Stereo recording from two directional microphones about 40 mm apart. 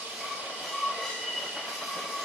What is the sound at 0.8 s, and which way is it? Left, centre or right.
Train, centre.